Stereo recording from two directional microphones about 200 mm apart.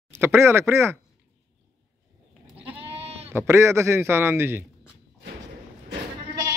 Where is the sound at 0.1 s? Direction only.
10° right (ahead or behind).